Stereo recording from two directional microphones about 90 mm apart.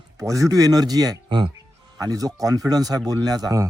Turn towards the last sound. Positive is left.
turn(degrees=-45)  # may be behind; listen again after turning